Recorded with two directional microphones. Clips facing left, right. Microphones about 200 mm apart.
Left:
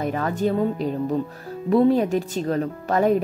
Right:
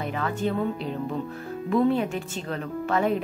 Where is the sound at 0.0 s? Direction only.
40° left (ahead or behind).